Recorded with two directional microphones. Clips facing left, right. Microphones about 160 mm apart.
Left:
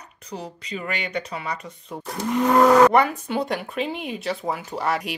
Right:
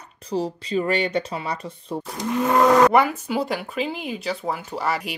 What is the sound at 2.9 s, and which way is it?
Speech, 5° right (ahead or behind).